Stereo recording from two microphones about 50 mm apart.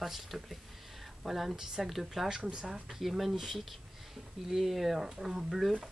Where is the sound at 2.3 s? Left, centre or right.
Centre.